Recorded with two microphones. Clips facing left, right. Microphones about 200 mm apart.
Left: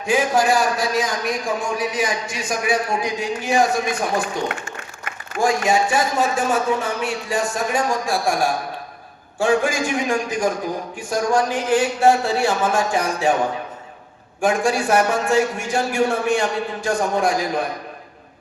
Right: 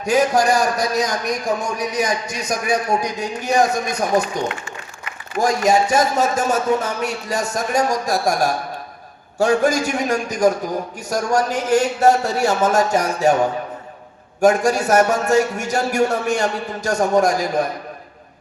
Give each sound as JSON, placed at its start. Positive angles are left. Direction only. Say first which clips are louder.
{"t": 0.0, "sound": "a man's voice", "louder": "right 2 dB", "side_deg": -40}
{"t": 5.4, "sound": "a man's voice", "louder": "right 2 dB", "side_deg": -40}
{"t": 14.4, "sound": "a man's voice", "louder": "right 4 dB", "side_deg": -40}